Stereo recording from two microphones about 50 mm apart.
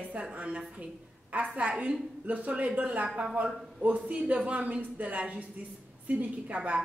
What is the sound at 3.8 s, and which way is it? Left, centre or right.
Speech, right.